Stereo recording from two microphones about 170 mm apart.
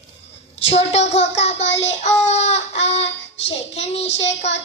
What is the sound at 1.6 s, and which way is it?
Child singing, 90° left.